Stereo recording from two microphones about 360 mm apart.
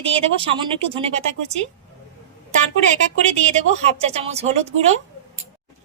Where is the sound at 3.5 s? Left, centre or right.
Centre.